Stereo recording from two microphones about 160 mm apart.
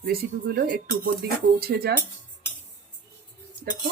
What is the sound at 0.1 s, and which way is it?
Speech, 70° right (ahead or behind).